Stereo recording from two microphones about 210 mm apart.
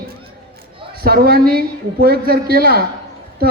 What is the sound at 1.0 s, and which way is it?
A man's voice, 45° right (ahead or behind).